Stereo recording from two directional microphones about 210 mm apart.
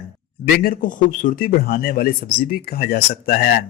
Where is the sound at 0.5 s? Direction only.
45° left (ahead or behind).